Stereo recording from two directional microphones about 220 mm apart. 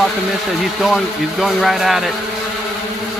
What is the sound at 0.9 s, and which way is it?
Speech, centre (ahead or behind).